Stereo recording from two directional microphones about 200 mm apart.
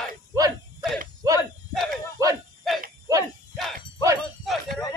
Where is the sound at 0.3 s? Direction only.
20° right (ahead or behind).